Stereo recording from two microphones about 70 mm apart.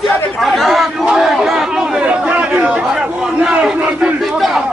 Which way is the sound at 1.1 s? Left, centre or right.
Centre.